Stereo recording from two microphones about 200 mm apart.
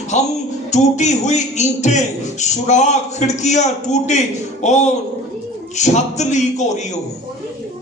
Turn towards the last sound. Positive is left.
turn(degrees=35)  # may be behind; listen again after turning